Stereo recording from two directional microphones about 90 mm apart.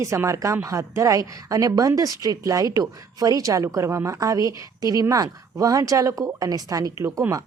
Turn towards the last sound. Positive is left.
turn(degrees=-35)  # may be behind; listen again after turning